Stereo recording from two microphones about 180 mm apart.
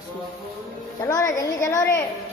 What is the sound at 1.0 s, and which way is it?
Speech, 20° left (ahead or behind).